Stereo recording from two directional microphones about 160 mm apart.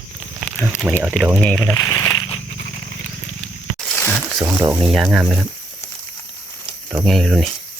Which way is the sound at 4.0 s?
10° left (ahead or behind).